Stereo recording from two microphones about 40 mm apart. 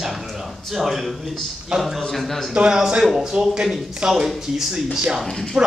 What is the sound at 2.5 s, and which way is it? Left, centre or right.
Speech, centre.